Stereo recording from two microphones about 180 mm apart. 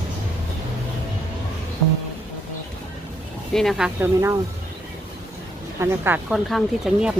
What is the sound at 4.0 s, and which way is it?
Speech, 15° right (ahead or behind).